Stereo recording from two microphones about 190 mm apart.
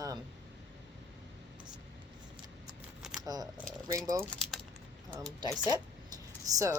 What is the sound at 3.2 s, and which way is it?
Speech, 20° right (ahead or behind).